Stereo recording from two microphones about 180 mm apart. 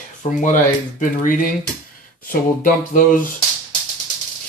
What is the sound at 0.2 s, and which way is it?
Speech, 45° left (ahead or behind).